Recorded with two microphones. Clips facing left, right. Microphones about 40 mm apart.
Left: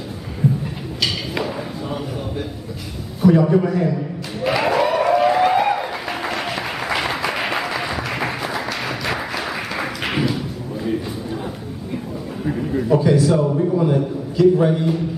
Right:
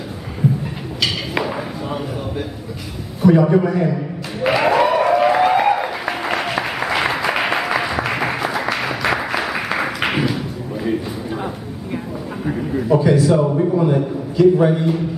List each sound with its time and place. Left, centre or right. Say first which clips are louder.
0.9 s a sound: right 2 dB; centre
1.3 s chop: right 2 dB; centre
3.2 s a man's voice: right 1 dB; centre
4.5 s applause: right 3 dB; centre
12.7 s a man's voice: right 1 dB; centre
13.4 s a man's voice: right 2 dB; right
13.7 s a man's voice: right 1 dB; centre